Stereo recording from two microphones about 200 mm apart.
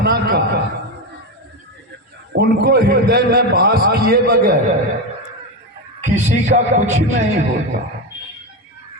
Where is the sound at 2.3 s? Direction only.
55° right (ahead or behind).